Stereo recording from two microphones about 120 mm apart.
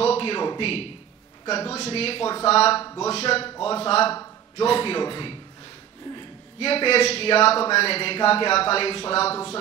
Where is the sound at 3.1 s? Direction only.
55° left (ahead or behind).